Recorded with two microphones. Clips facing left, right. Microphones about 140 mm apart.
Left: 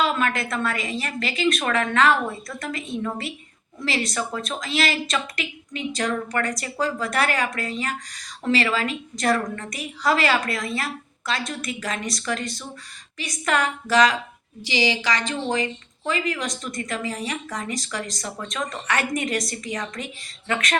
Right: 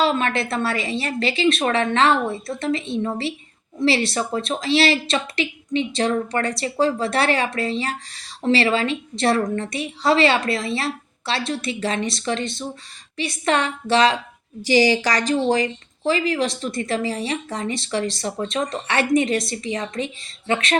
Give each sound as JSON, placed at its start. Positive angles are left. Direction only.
{"t": 0.0, "sound": "speech", "side_deg": -30}
{"t": 14.6, "sound": "a woman's voice", "side_deg": -45}